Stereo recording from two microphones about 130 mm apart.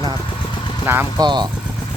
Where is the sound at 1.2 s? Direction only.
35° right (ahead or behind).